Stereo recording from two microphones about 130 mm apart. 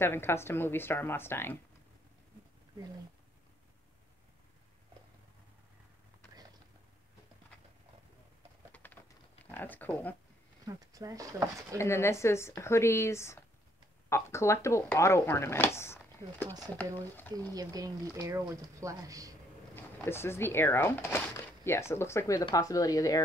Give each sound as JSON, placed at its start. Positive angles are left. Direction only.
{"t": 0.0, "sound": "speech", "side_deg": 20}
{"t": 8.7, "sound": "a sound", "side_deg": 15}
{"t": 9.5, "sound": "speech", "side_deg": 15}
{"t": 10.6, "sound": "speech", "side_deg": -30}
{"t": 11.8, "sound": "speech", "side_deg": 20}
{"t": 17.6, "sound": "speech", "side_deg": -30}
{"t": 19.7, "sound": "speech", "side_deg": 20}